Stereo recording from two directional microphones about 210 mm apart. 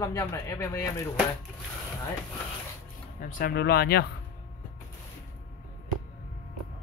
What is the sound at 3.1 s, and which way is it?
Speech, 40° left (ahead or behind).